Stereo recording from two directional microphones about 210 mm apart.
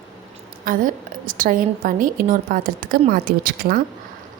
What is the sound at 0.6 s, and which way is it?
A woman's voice, 40° right (ahead or behind).